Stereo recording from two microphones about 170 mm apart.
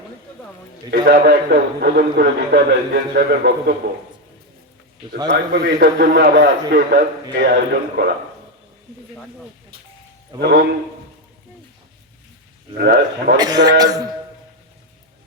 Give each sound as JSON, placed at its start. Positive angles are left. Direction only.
{"t": 0.9, "sound": "a man's voice", "side_deg": -65}
{"t": 5.3, "sound": "a man's voice", "side_deg": -80}
{"t": 12.8, "sound": "a man's voice", "side_deg": -70}
{"t": 13.3, "sound": "a man's voice", "side_deg": -25}